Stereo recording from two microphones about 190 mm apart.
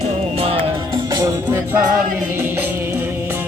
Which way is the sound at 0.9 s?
20° right (ahead or behind).